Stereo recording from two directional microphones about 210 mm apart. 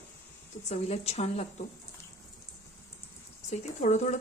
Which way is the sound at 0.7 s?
30° left (ahead or behind).